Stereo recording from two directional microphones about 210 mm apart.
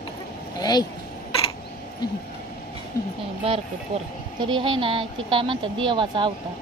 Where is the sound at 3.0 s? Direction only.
15° left (ahead or behind).